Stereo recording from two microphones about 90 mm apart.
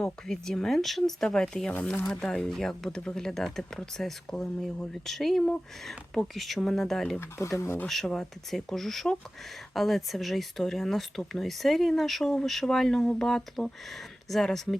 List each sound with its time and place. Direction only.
0.0 s speech: 5° left (ahead or behind)
1.7 s speech: 20° left (ahead or behind)
7.2 s speech: 30° left (ahead or behind)
7.9 s speech: 5° left (ahead or behind)